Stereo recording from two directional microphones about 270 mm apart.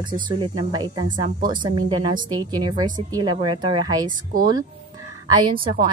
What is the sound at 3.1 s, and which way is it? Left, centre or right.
A woman's voice, centre.